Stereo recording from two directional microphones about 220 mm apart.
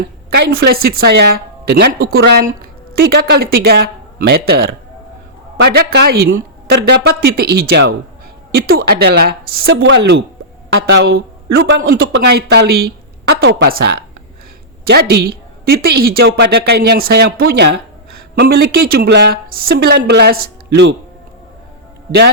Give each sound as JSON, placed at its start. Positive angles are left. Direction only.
{"t": 0.5, "sound": "speech", "side_deg": -45}
{"t": 13.7, "sound": "speech", "side_deg": -45}